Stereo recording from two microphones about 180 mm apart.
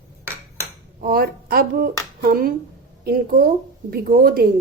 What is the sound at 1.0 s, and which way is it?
A woman's voice, 55° right (ahead or behind).